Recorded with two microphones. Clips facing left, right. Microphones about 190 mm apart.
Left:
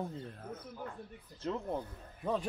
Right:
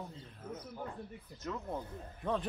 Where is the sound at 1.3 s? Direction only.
30° left (ahead or behind).